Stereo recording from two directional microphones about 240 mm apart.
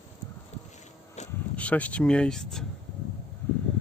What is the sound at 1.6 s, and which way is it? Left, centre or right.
Speech, centre.